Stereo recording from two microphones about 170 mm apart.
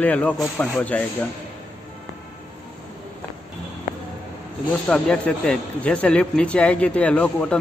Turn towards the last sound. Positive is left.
turn(degrees=5)  # may be behind; listen again after turning